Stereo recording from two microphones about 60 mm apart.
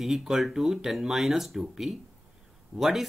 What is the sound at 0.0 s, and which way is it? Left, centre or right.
Speech, centre.